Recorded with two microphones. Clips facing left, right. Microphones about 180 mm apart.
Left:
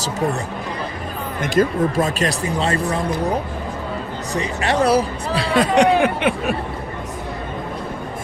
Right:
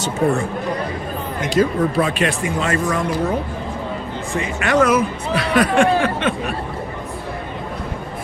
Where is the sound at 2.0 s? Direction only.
40° left (ahead or behind).